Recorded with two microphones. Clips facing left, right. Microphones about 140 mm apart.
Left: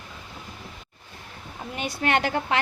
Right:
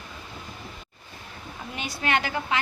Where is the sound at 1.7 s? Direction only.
50° left (ahead or behind).